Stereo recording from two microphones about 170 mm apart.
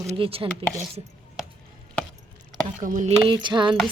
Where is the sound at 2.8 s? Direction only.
45° right (ahead or behind).